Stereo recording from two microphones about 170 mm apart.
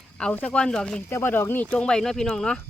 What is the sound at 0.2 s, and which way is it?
Speech, 5° left (ahead or behind).